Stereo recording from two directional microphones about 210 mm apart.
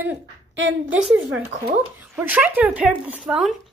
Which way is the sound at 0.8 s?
5° right (ahead or behind).